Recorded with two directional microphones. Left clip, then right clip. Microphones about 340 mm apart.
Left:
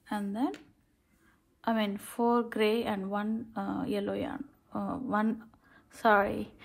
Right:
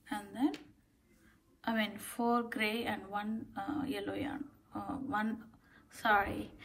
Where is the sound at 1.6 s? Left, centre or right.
Centre.